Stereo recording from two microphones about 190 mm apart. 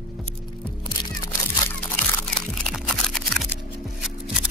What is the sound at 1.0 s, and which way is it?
Single-lens reflex camera, 20° left (ahead or behind).